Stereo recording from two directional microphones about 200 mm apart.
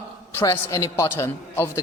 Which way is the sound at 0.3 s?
15° left (ahead or behind).